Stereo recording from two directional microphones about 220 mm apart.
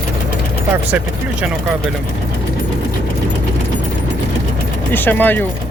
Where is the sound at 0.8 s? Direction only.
5° right (ahead or behind).